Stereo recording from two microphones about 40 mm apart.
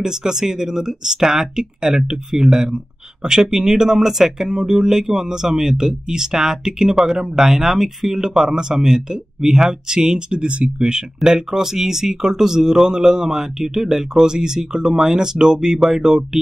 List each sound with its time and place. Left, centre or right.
0.0 s speech: centre